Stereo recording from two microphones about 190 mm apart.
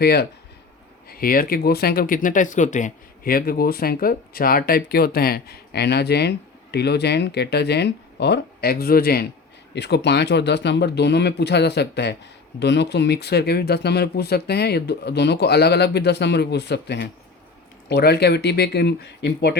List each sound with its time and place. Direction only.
0.0 s speech: 55° left (ahead or behind)